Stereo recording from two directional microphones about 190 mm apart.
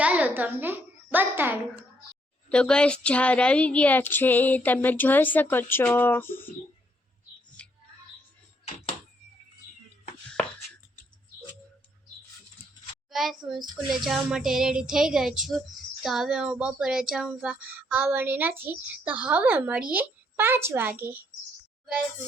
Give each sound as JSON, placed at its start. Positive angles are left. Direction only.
{"t": 0.0, "sound": "a child's voice", "side_deg": -10}
{"t": 2.5, "sound": "a woman's voice", "side_deg": 5}
{"t": 7.6, "sound": "music", "side_deg": 5}
{"t": 8.6, "sound": "a sound", "side_deg": 30}
{"t": 13.1, "sound": "a child's voice", "side_deg": 0}